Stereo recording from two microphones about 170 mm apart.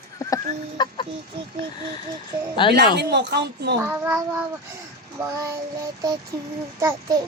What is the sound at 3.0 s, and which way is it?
Speech, 80° right.